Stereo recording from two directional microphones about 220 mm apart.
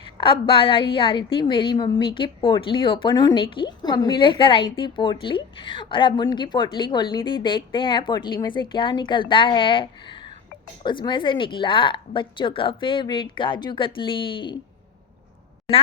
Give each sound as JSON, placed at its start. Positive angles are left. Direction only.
{"t": 0.0, "sound": "a woman's voice", "side_deg": 25}